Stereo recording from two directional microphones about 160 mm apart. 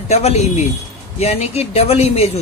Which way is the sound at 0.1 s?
45° left (ahead or behind).